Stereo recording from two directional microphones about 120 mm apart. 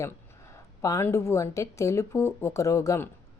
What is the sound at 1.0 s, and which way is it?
Speech, 20° left (ahead or behind).